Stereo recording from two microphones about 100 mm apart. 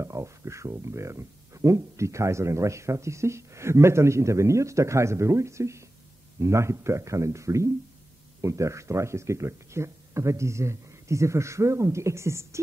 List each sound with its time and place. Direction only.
0.0 s speech: 30° right (ahead or behind)